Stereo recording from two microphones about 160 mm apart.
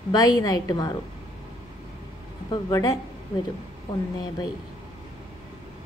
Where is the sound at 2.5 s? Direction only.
20° left (ahead or behind).